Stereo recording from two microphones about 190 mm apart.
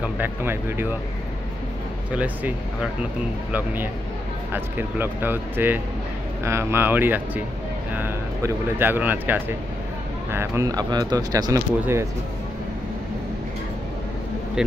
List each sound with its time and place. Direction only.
0.0 s speech: 10° right (ahead or behind)
2.1 s speech: 10° right (ahead or behind)